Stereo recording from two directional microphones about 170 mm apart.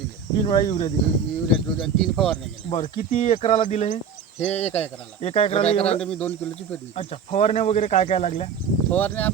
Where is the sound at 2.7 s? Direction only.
30° left (ahead or behind).